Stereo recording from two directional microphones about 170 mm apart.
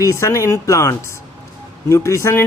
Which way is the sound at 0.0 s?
15° left (ahead or behind).